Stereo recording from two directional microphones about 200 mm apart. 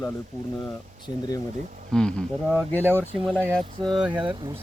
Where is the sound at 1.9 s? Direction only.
5° left (ahead or behind).